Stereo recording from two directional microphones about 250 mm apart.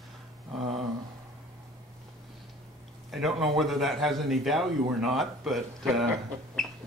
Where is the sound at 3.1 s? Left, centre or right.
Centre.